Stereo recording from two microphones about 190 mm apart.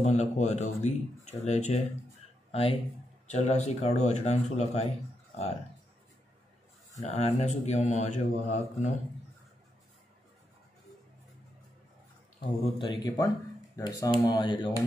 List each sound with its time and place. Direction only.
0.0 s speech: 35° left (ahead or behind)
6.9 s speech: 35° left (ahead or behind)
12.4 s speech: 30° left (ahead or behind)